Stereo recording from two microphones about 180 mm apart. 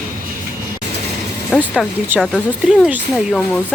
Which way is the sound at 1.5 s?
5° right (ahead or behind).